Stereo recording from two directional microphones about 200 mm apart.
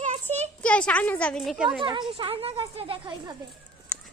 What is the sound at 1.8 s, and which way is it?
A woman's voice, 25° right (ahead or behind).